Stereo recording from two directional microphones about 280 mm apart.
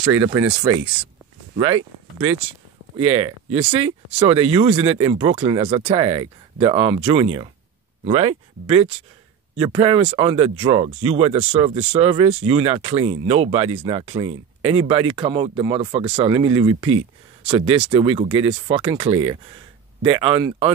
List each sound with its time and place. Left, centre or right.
0.0 s speech: centre